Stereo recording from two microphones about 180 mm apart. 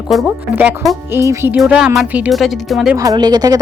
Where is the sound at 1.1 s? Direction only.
15° right (ahead or behind).